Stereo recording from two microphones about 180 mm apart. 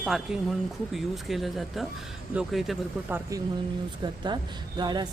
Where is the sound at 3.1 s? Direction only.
20° right (ahead or behind).